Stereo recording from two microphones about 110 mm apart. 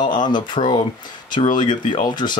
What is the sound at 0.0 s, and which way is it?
Speech, 45° left (ahead or behind).